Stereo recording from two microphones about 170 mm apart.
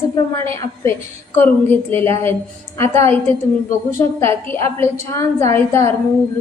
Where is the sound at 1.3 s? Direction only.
10° left (ahead or behind).